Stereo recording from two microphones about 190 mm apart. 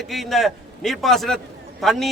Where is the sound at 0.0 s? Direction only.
Centre (ahead or behind).